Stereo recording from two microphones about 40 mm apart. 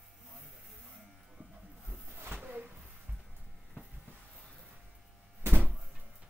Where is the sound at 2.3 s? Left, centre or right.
Right.